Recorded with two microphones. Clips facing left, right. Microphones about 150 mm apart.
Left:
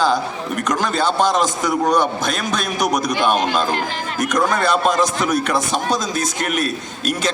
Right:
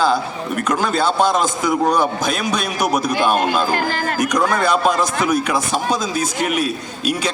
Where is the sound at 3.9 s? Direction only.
60° right (ahead or behind).